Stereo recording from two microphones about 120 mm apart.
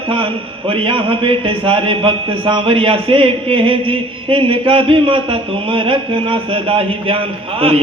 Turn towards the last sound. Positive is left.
turn(degrees=-50)  # may be behind; listen again after turning